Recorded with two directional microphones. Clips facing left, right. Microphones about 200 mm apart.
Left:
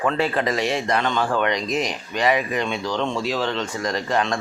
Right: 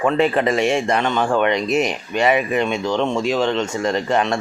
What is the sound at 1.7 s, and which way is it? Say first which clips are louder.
Speech: right 5 dB; 70° right (ahead or behind).